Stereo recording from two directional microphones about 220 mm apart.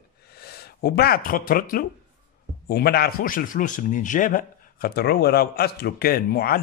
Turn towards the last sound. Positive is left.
turn(degrees=45)  # may be behind; listen again after turning